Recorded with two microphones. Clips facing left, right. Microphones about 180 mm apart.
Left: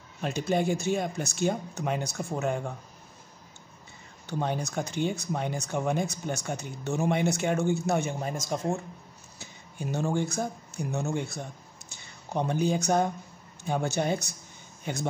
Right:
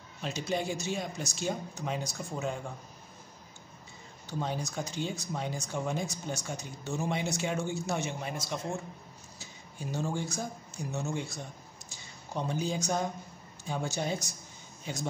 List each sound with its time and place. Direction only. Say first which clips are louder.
0.2 s speech: left 6 dB; 55° left (ahead or behind)
4.3 s speech: left 4 dB; 60° left (ahead or behind); by 8.5 s 45° left (ahead or behind)
9.4 s speech: left 5 dB; 60° left (ahead or behind)